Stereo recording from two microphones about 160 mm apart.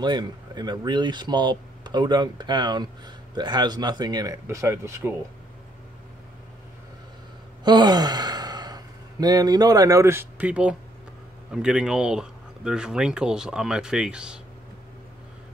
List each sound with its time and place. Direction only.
0.0 s speech: 25° right (ahead or behind)
7.6 s a man's voice: 25° right (ahead or behind); by 14.4 s 5° right (ahead or behind)